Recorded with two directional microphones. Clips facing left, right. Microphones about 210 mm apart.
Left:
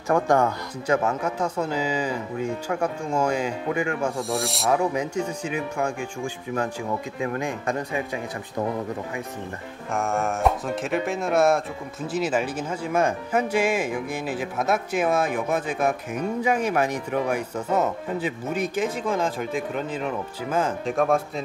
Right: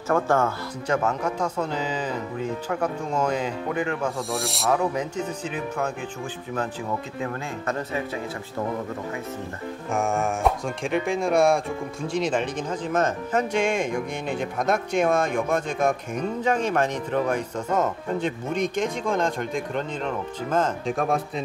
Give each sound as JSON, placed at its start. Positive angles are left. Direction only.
{"t": 0.1, "sound": "speech", "side_deg": 15}
{"t": 7.3, "sound": "speech", "side_deg": 15}
{"t": 9.9, "sound": "speech", "side_deg": 0}